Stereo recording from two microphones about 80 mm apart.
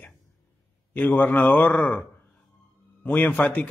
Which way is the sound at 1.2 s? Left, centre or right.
Left.